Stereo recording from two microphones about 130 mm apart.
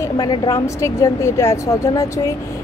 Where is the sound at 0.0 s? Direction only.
25° left (ahead or behind).